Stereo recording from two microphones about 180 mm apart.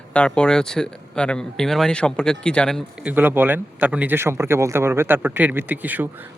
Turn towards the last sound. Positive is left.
turn(degrees=-10)  # may be behind; listen again after turning